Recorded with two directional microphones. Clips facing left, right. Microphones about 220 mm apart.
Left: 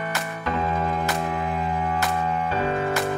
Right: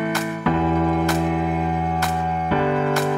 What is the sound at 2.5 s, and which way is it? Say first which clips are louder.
Music: right 7 dB; 75° right (ahead or behind).